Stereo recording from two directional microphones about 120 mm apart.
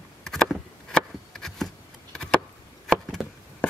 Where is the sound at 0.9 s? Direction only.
5° left (ahead or behind).